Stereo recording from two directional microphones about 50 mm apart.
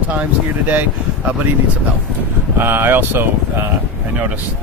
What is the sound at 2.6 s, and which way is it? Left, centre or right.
Speech, right.